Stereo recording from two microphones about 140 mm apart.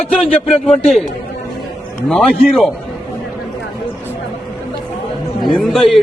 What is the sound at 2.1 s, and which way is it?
Speech, centre (ahead or behind).